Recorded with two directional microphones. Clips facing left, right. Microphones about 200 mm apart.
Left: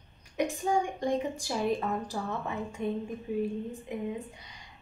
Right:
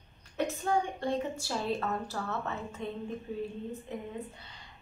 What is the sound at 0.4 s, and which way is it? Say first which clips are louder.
A woman's voice: left 2 dB; 15° left (ahead or behind).